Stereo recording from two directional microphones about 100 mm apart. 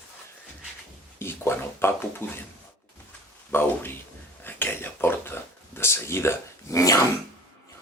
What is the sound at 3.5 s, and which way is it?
Speech, 20° left (ahead or behind).